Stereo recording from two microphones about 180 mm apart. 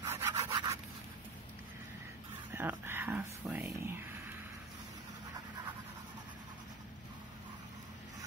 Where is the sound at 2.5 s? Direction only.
10° right (ahead or behind).